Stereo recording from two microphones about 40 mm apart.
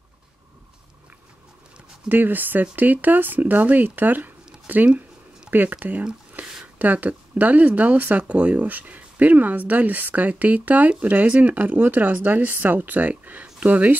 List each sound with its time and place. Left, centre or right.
2.0 s speech: right
6.4 s a sound: right
6.8 s speech: right
8.6 s speech: right